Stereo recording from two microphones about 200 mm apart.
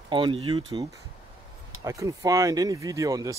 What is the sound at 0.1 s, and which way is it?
Speech, 25° right (ahead or behind).